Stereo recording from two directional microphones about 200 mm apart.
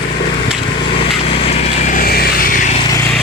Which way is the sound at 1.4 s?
30° left (ahead or behind).